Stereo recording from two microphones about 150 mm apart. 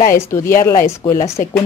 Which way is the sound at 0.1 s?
20° left (ahead or behind).